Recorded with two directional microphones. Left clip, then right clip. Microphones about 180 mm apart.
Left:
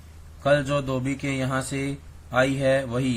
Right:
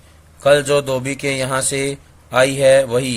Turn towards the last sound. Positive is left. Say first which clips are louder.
# right 11 dB
turn(degrees=-35)  # may be behind; listen again after turning